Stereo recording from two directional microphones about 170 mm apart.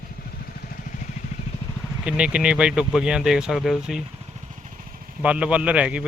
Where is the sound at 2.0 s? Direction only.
5° right (ahead or behind).